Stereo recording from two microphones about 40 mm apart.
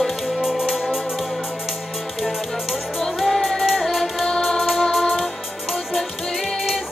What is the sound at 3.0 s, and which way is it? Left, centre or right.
Music, centre.